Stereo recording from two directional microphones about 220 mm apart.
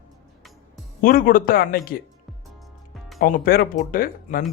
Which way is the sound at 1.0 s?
40° left (ahead or behind).